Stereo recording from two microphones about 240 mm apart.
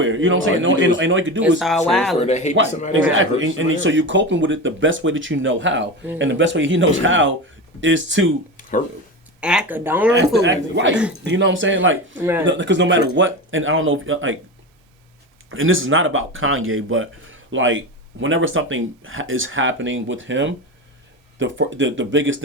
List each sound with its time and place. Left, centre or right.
0.0 s speech: right
1.4 s speech: centre
2.1 s speech: left
3.1 s speech: right
9.4 s speech: centre
10.4 s speech: right
10.9 s speech: centre
11.3 s speech: right
12.2 s speech: centre
12.5 s speech: right
15.4 s speech: right